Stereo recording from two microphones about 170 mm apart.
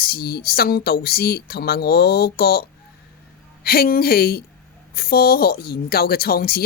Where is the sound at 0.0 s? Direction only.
65° left (ahead or behind).